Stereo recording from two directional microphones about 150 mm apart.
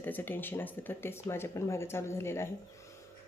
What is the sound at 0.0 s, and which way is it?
Speech, 15° left (ahead or behind).